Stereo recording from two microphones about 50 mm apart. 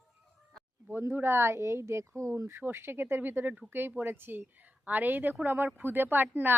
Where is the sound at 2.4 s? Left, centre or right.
Right.